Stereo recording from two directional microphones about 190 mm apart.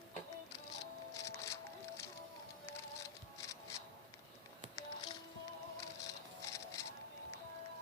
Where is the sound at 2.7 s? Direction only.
15° left (ahead or behind).